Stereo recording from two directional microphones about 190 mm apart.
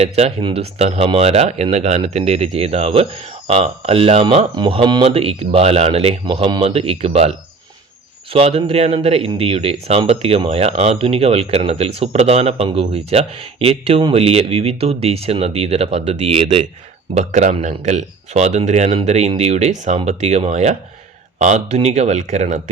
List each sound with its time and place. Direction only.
0.0 s speech: 35° right (ahead or behind)